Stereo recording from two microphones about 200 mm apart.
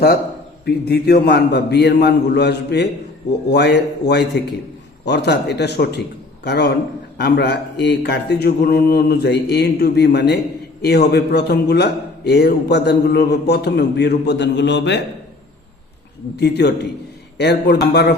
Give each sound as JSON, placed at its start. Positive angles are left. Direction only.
{"t": 0.6, "sound": "a man's voice", "side_deg": 55}
{"t": 16.4, "sound": "a man's voice", "side_deg": 55}